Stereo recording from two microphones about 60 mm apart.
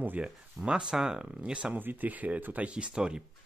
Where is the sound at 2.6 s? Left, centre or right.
Centre.